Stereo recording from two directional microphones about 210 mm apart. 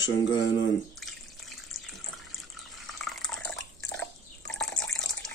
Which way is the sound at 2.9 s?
Centre (ahead or behind).